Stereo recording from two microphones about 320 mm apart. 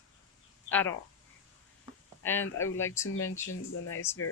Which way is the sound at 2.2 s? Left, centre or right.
Centre.